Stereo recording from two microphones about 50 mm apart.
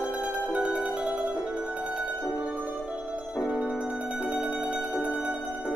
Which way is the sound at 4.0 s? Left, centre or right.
Right.